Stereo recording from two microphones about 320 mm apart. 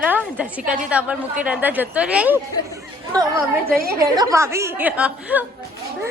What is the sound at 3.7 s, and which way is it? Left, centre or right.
Speech, right.